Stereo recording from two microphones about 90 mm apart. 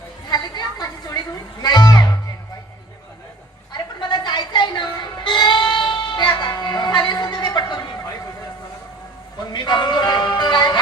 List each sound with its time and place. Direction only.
0.3 s a sound: 50° left (ahead or behind)
1.6 s music: 50° left (ahead or behind)
3.7 s music: 55° left (ahead or behind)
9.4 s music: 55° left (ahead or behind)